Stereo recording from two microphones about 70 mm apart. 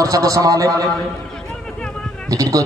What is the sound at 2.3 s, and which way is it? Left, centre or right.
Speech, right.